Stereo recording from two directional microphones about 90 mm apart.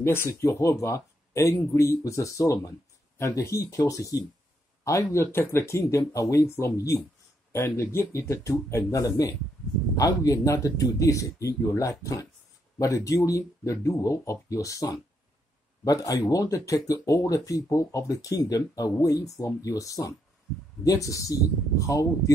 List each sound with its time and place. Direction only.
0.0 s speech: 30° left (ahead or behind)